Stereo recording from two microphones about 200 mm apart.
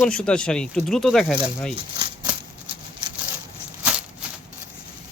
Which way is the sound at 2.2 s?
25° right (ahead or behind).